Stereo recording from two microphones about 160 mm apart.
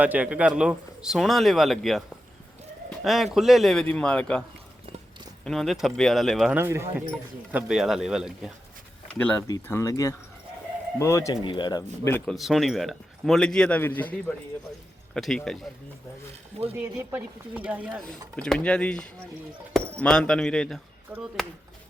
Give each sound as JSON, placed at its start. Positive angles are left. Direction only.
{"t": 0.0, "sound": "speech", "side_deg": -10}
{"t": 5.5, "sound": "speech", "side_deg": 0}
{"t": 6.6, "sound": "speech", "side_deg": -15}
{"t": 7.5, "sound": "speech", "side_deg": -5}
{"t": 9.1, "sound": "speech", "side_deg": 10}
{"t": 9.5, "sound": "speech", "side_deg": 20}
{"t": 11.4, "sound": "speech", "side_deg": 30}
{"t": 12.2, "sound": "speech", "side_deg": 0}
{"t": 16.7, "sound": "speech", "side_deg": -10}
{"t": 18.3, "sound": "speech", "side_deg": 5}